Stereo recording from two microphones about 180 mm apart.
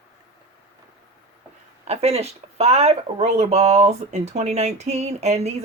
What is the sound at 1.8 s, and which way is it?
Speech, 35° right (ahead or behind).